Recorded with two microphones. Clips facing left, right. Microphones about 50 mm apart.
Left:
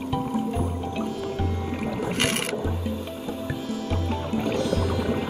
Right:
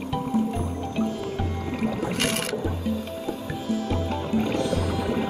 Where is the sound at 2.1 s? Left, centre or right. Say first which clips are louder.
Left 1 dB; left.